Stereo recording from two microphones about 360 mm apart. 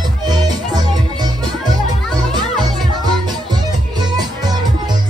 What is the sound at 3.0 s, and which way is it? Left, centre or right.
Music, centre.